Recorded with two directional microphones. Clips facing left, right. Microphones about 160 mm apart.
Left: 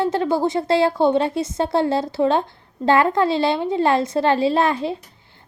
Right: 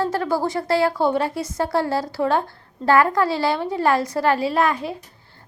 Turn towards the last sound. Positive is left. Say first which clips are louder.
# left 2 dB
turn(degrees=25)  # may be behind; listen again after turning